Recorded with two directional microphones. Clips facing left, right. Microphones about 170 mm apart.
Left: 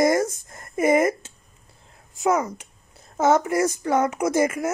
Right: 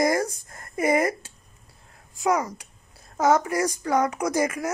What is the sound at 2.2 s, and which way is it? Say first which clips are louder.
Speech: left 2 dB; 25° left (ahead or behind).